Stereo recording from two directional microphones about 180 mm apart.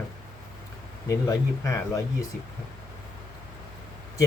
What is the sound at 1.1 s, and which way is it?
Speech, 15° left (ahead or behind).